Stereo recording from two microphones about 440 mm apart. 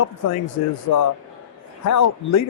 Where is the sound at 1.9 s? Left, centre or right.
Left.